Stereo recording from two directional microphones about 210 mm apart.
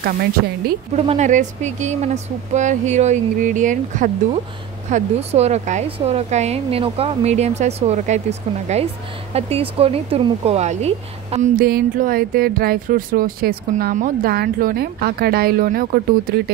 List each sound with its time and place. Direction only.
0.0 s speech: 45° right (ahead or behind)
1.0 s a woman's voice: 35° right (ahead or behind)